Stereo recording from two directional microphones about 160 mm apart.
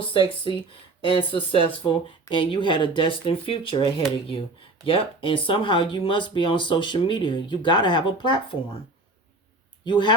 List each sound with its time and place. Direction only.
0.1 s speech: 30° left (ahead or behind)
9.8 s speech: 30° left (ahead or behind)